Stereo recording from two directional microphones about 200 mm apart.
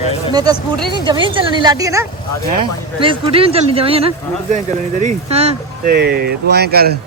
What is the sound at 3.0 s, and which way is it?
Speech, 25° right (ahead or behind).